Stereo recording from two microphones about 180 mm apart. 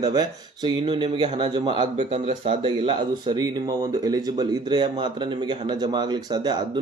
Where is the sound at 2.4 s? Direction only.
30° right (ahead or behind).